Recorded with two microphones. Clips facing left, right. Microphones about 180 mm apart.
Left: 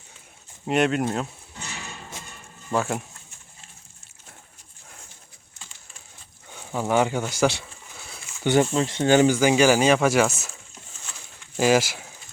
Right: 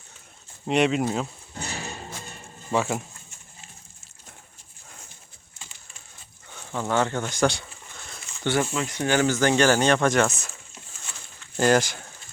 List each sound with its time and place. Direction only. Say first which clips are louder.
0.6 s speech: even; centre (ahead or behind)
1.5 s music: right 5 dB; 40° right (ahead or behind)
2.7 s speech: even; centre (ahead or behind)
6.5 s a sound: left 3 dB; 10° left (ahead or behind)
8.7 s speech: left 5 dB; 30° left (ahead or behind); by 10.5 s 5° left (ahead or behind)
11.5 s speech: left 1 dB; 5° left (ahead or behind)